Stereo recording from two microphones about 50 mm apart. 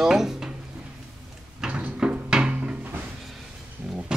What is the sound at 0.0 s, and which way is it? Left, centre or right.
Drawer open or close, centre.